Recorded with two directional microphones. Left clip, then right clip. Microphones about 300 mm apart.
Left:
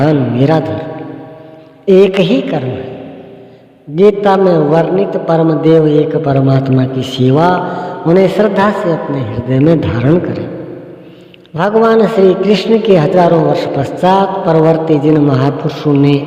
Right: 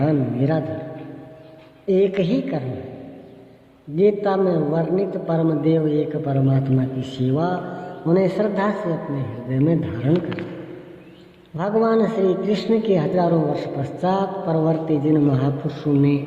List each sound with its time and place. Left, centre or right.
0.0 s a man's voice: left
1.9 s a man's voice: left
3.9 s a man's voice: left
11.5 s a man's voice: left